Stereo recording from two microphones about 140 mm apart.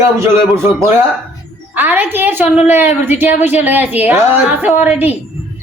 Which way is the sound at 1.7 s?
10° right (ahead or behind).